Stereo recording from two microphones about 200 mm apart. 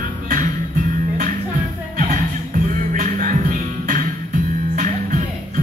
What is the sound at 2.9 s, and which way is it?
Music, 40° right (ahead or behind).